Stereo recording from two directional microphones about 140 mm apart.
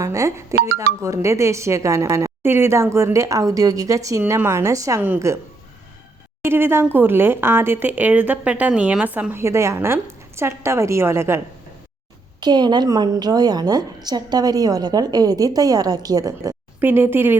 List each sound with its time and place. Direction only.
0.0 s speech: 20° right (ahead or behind)
6.4 s speech: 15° right (ahead or behind)
12.4 s speech: 30° right (ahead or behind)
16.8 s speech: 15° right (ahead or behind)